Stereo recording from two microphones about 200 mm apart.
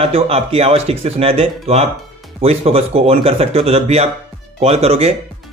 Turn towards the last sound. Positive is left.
turn(degrees=-30)  # may be behind; listen again after turning